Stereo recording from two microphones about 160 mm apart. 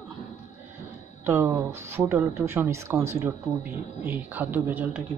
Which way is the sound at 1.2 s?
15° right (ahead or behind).